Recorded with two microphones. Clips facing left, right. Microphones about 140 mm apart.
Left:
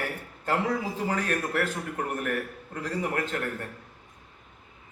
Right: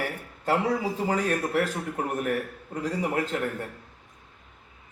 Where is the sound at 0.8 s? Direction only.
15° right (ahead or behind).